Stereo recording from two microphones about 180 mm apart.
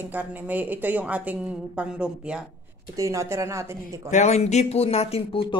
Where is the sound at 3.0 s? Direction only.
15° right (ahead or behind).